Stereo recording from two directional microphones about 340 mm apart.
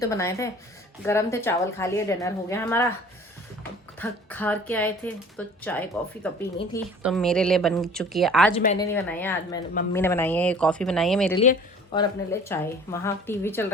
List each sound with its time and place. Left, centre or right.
0.0 s speech: centre
4.0 s speech: centre
8.5 s speech: centre
8.9 s speech: centre
11.3 s speech: centre